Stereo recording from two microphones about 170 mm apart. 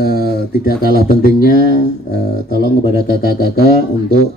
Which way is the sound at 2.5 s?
60° right (ahead or behind).